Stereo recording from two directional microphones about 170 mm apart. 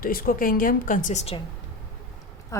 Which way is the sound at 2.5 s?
15° left (ahead or behind).